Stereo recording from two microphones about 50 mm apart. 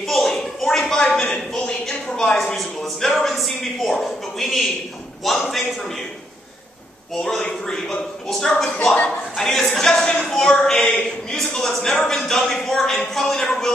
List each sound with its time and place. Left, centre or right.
0.0 s a sound: centre
1.5 s a man's voice: centre
7.4 s speech: centre
8.3 s speech: centre
10.8 s speech: left
11.3 s speech: centre